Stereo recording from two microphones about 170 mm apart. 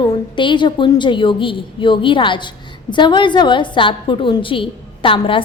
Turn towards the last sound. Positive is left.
turn(degrees=30)  # may be behind; listen again after turning